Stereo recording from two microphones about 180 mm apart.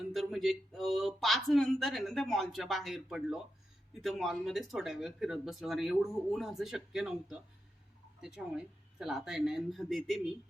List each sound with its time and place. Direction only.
0.1 s speech: centre (ahead or behind)